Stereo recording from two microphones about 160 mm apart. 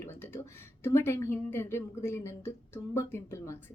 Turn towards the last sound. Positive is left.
turn(degrees=15)  # may be behind; listen again after turning